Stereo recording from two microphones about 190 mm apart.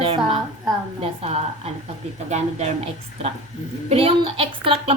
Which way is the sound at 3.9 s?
30° right (ahead or behind).